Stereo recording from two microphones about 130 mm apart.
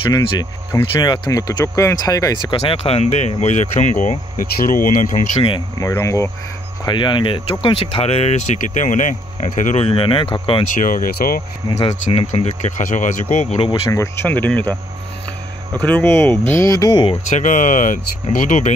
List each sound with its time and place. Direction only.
1.0 s speech: 35° left (ahead or behind)
2.6 s speech: 50° left (ahead or behind); by 5.2 s 85° left
5.8 s speech: 25° left (ahead or behind)
6.8 s speech: 35° left (ahead or behind); by 8.4 s 55° left (ahead or behind)
8.5 s speech: 75° left (ahead or behind)
9.8 s speech: 45° left (ahead or behind)
10.7 s speech: 90° left
11.9 s speech: 55° left (ahead or behind); by 13.2 s 75° left (ahead or behind)
13.3 s speech: 65° left (ahead or behind)
13.8 s speech: 20° left (ahead or behind)
15.8 s speech: 15° left (ahead or behind); by 17.2 s 35° left (ahead or behind)
17.3 s speech: 80° left